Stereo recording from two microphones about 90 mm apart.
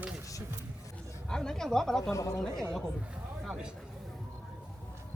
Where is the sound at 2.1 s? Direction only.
35° left (ahead or behind).